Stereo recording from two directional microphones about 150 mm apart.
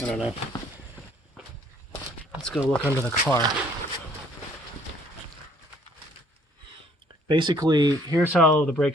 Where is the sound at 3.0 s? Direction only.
15° left (ahead or behind).